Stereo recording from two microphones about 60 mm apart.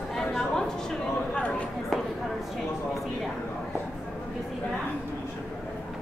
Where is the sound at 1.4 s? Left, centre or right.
Left.